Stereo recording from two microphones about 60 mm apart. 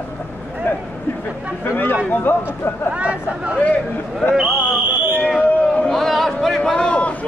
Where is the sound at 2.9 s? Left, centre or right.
Right.